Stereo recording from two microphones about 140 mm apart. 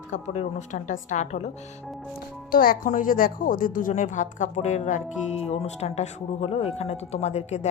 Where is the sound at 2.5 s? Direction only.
90° left.